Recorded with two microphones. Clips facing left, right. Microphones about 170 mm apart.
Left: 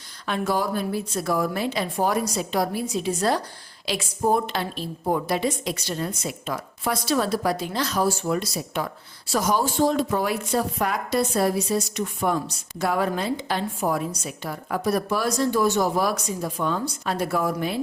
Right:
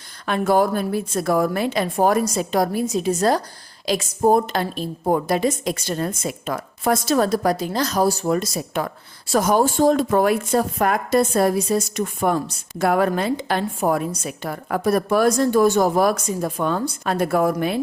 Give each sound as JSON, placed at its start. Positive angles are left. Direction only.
{"t": 0.3, "sound": "a woman's voice", "side_deg": -55}